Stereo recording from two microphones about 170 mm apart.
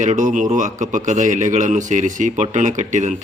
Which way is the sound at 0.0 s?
45° right (ahead or behind).